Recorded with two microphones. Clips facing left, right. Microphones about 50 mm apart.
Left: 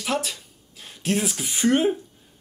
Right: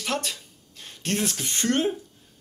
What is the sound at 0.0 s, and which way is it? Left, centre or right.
A man's voice, centre.